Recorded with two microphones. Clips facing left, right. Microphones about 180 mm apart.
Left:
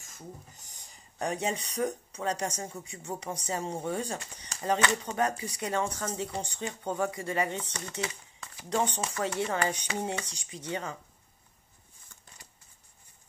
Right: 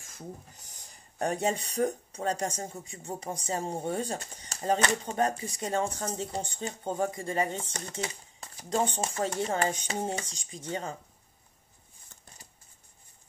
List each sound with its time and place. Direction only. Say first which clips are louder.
1.1 s speech: right 3 dB; 50° right (ahead or behind)
2.4 s speech: right 1 dB; 30° right (ahead or behind)
5.4 s speech: even; 45° right (ahead or behind)
5.7 s speech: right 1 dB; 35° right (ahead or behind)